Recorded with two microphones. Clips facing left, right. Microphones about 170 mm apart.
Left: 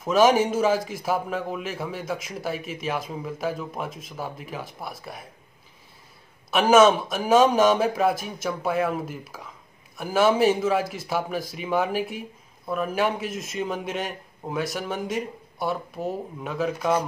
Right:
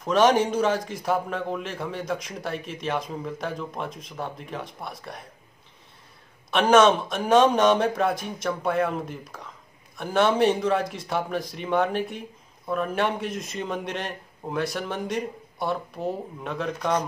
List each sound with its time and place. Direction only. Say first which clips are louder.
0.0 s speech: left 1 dB; 5° left (ahead or behind)
6.5 s speech: left 1 dB; 5° left (ahead or behind)